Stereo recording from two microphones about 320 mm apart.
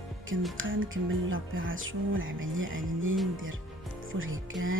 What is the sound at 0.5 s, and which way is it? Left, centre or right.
Music, right.